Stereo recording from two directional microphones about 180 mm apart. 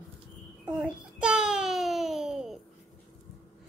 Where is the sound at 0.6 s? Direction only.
5° right (ahead or behind).